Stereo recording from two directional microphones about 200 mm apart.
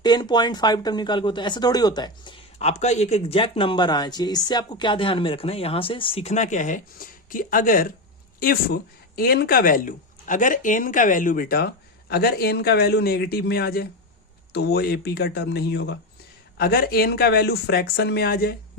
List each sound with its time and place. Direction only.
0.0 s speech: 20° left (ahead or behind); by 18.5 s 50° left (ahead or behind)